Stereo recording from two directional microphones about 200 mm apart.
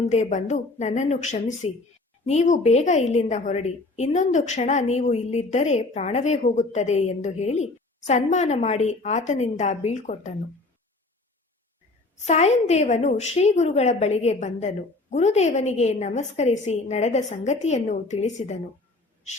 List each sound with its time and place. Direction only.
0.0 s a woman's voice: 35° left (ahead or behind)
12.2 s a woman's voice: 35° left (ahead or behind)